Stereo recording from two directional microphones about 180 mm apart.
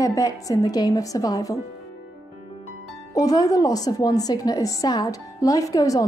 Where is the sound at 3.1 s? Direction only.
20° left (ahead or behind).